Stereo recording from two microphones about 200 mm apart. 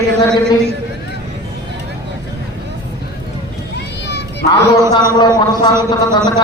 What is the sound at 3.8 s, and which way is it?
Children playing, 60° left (ahead or behind).